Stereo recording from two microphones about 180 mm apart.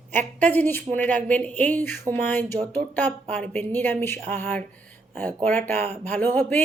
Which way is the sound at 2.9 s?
10° left (ahead or behind).